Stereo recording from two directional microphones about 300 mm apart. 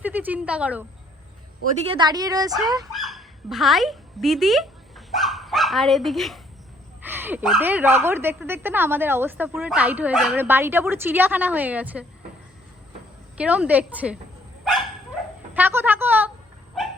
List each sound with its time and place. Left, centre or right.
0.0 s a woman's voice: centre
1.9 s a woman's voice: centre
2.9 s a woman's voice: centre
13.3 s a woman's voice: centre
14.6 s dog: centre
15.5 s a sound: centre